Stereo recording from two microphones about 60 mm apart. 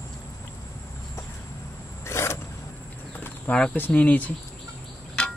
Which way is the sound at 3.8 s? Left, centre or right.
Left.